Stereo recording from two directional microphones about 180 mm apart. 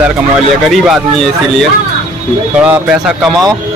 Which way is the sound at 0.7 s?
Centre (ahead or behind).